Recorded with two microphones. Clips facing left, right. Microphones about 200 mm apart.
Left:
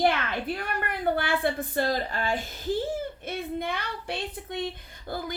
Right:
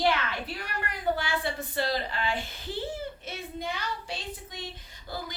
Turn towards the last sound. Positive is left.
turn(degrees=55)  # may be behind; listen again after turning